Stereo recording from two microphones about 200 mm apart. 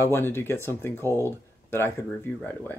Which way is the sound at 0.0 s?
10° left (ahead or behind).